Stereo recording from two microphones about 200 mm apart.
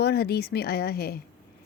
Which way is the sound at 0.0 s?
55° left (ahead or behind).